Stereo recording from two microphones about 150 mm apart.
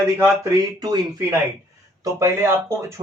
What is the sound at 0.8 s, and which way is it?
Speech, 30° right (ahead or behind).